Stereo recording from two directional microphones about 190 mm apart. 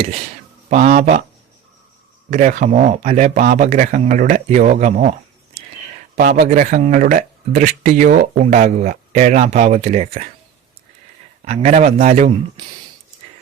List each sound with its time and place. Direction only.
0.7 s speech: 40° right (ahead or behind)
2.3 s speech: 40° right (ahead or behind)
6.1 s speech: 40° right (ahead or behind)
11.4 s speech: 35° right (ahead or behind)
12.6 s speech: 20° right (ahead or behind)